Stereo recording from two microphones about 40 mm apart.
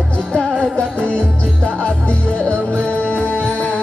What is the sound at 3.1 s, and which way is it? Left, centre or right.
Music, left.